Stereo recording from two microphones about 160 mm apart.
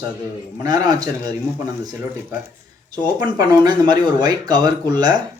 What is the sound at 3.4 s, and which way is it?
Speech, 25° right (ahead or behind).